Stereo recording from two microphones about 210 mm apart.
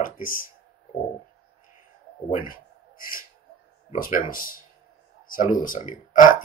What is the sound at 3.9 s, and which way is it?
Speech, 40° left (ahead or behind).